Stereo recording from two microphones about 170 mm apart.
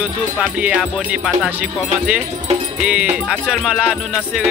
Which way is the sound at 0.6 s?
5° right (ahead or behind).